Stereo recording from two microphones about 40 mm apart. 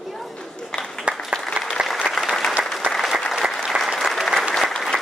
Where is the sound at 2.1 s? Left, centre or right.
Centre.